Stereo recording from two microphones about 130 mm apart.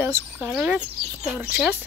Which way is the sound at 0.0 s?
15° right (ahead or behind).